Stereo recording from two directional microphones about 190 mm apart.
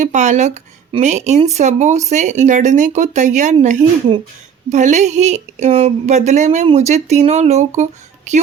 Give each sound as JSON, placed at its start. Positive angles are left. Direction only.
{"t": 0.0, "sound": "speech", "side_deg": -40}